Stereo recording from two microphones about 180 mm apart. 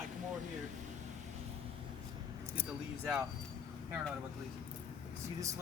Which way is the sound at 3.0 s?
10° right (ahead or behind).